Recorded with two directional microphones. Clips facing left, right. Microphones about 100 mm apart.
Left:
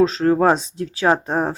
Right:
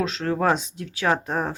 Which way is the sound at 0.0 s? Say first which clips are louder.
Left 8 dB; 35° left (ahead or behind).